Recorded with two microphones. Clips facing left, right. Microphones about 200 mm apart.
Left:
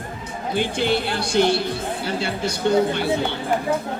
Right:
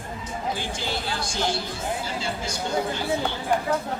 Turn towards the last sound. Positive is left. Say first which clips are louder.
# left 4 dB
turn(degrees=65)  # may be behind; listen again after turning